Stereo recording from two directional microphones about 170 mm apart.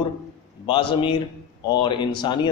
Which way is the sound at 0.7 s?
30° left (ahead or behind).